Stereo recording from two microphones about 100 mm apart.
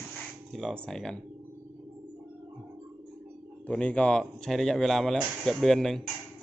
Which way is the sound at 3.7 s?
10° left (ahead or behind).